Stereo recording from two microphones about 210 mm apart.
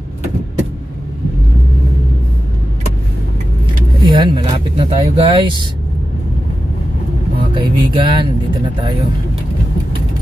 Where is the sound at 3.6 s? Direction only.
20° right (ahead or behind).